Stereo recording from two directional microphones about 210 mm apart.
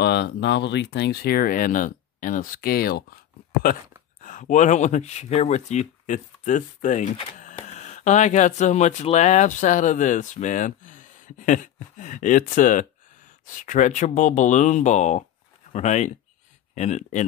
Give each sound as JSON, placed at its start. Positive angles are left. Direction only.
{"t": 0.0, "sound": "speech", "side_deg": 55}
{"t": 4.2, "sound": "speech", "side_deg": 35}